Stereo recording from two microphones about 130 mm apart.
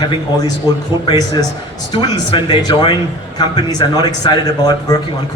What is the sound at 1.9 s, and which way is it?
A man's voice, 40° left (ahead or behind).